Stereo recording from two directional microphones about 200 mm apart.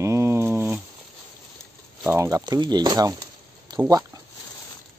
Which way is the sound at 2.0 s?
15° right (ahead or behind).